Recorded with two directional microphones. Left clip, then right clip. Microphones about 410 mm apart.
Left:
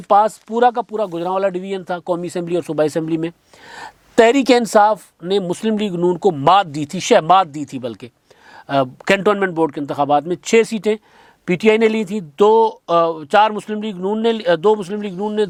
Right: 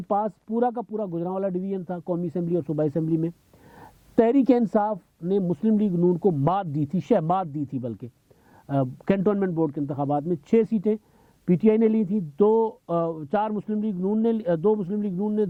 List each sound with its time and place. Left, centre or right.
0.1 s speech: centre
2.0 s speech: centre
2.2 s speech: centre